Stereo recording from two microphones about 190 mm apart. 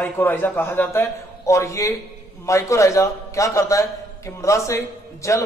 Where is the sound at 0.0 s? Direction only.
10° left (ahead or behind).